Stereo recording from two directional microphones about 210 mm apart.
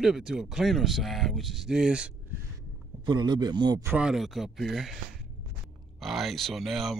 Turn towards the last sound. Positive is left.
turn(degrees=0)  # may be behind; listen again after turning